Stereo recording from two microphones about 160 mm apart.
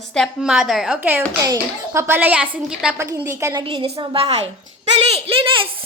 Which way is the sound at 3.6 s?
35° right (ahead or behind).